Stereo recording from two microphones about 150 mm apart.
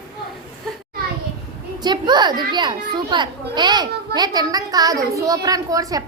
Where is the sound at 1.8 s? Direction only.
30° right (ahead or behind).